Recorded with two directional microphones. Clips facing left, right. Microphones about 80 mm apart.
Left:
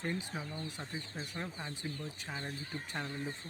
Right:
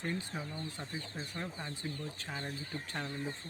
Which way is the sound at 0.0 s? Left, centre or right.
Centre.